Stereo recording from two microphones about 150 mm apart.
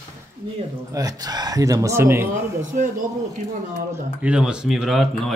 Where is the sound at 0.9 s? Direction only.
25° right (ahead or behind).